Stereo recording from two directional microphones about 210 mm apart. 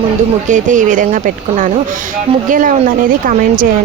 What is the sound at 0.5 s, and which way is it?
Speech, 35° right (ahead or behind).